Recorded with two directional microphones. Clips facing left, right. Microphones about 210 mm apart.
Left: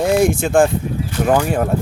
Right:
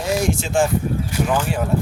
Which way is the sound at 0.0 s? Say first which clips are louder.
Left 6 dB; 55° left (ahead or behind).